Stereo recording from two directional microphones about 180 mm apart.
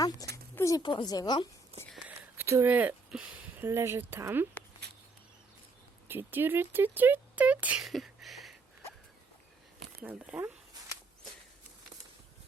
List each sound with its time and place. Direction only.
0.5 s a woman's voice: 20° left (ahead or behind)
2.0 s a sound: 15° right (ahead or behind)
3.7 s speech: 15° right (ahead or behind)
6.1 s speech: 10° right (ahead or behind)
10.0 s speech: 5° right (ahead or behind)